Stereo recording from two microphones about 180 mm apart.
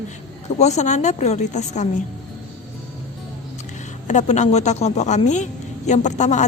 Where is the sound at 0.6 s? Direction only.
40° left (ahead or behind).